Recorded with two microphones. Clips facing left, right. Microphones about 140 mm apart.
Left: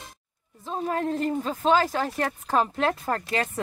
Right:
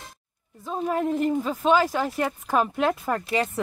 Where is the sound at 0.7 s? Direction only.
10° right (ahead or behind).